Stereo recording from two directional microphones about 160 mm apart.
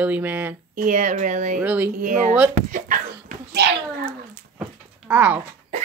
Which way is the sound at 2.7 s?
55° right (ahead or behind).